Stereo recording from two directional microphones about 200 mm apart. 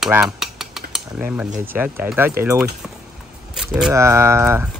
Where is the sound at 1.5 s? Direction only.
10° right (ahead or behind).